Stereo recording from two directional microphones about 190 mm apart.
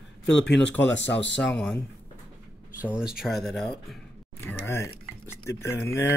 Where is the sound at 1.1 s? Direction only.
75° left (ahead or behind).